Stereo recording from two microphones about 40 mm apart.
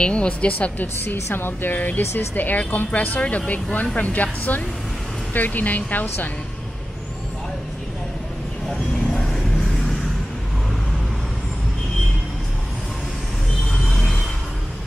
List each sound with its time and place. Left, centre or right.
0.0 s a woman's voice: left
0.5 s a woman's voice: left
2.9 s a woman's voice: left
8.6 s vehicle: centre